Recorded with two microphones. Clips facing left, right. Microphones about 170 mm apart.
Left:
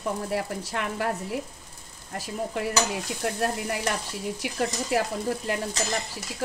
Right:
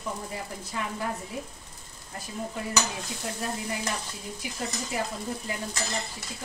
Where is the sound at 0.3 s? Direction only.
75° left (ahead or behind).